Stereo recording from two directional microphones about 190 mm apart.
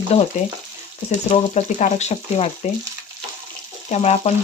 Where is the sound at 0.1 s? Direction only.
35° left (ahead or behind).